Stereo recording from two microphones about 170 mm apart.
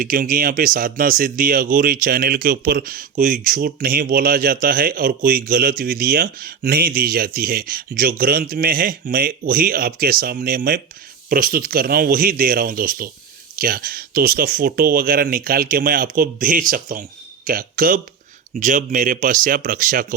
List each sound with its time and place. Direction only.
0.0 s speech: 55° right (ahead or behind)